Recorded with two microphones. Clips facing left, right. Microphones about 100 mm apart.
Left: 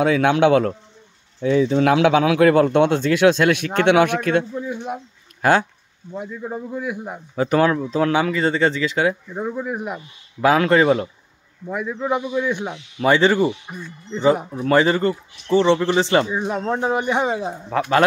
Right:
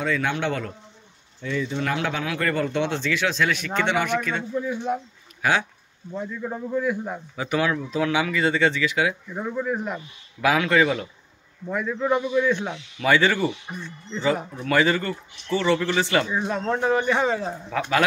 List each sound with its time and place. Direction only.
0.0 s a man's voice: 65° left (ahead or behind)
4.6 s speech: 20° left (ahead or behind)
5.4 s speech: 40° left (ahead or behind)
6.1 s speech: 15° left (ahead or behind)
7.3 s speech: 40° left (ahead or behind)
9.3 s speech: 15° left (ahead or behind)
10.4 s speech: 35° left (ahead or behind)
11.6 s speech: 10° left (ahead or behind)
13.0 s speech: 25° left (ahead or behind)
13.5 s speech: 10° left (ahead or behind)
14.1 s speech: 20° left (ahead or behind)
14.6 s speech: 30° left (ahead or behind)
16.3 s speech: 15° left (ahead or behind)
17.6 s speech: 35° left (ahead or behind)